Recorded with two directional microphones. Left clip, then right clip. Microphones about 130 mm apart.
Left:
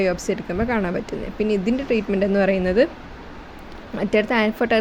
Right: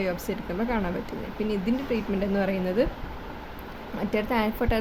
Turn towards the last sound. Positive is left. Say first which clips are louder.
# left 7 dB
turn(degrees=40)  # may be behind; listen again after turning